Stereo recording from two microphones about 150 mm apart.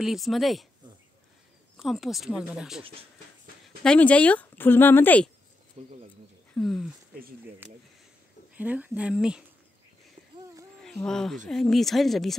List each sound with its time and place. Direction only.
0.0 s speech: centre (ahead or behind)
1.8 s speech: centre (ahead or behind)
5.8 s speech: 45° right (ahead or behind)
6.5 s speech: centre (ahead or behind)
7.6 s speech: 10° right (ahead or behind)
10.8 s speech: 5° left (ahead or behind)